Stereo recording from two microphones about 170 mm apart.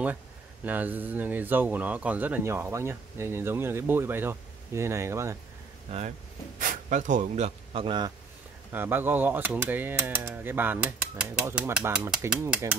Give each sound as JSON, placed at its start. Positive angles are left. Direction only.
{"t": 0.7, "sound": "speech", "side_deg": -10}
{"t": 5.9, "sound": "speech", "side_deg": -40}
{"t": 8.7, "sound": "speech", "side_deg": -10}